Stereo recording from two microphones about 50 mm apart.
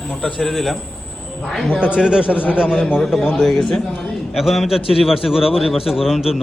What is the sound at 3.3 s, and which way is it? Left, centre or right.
A man's voice, centre.